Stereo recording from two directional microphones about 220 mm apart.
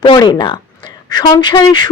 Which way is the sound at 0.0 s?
20° left (ahead or behind).